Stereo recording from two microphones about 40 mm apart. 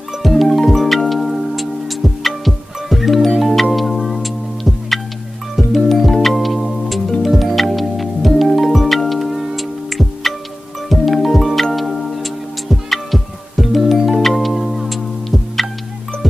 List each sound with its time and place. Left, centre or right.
0.2 s music: centre